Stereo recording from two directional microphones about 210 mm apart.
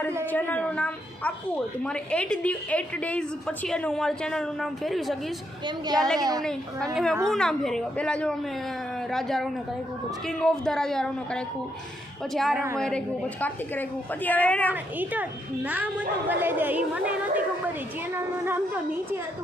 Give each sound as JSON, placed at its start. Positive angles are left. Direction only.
{"t": 0.3, "sound": "a woman's voice", "side_deg": 10}
{"t": 5.6, "sound": "a woman's voice", "side_deg": -20}
{"t": 6.9, "sound": "a woman's voice", "side_deg": 0}
{"t": 14.7, "sound": "a woman's voice", "side_deg": -10}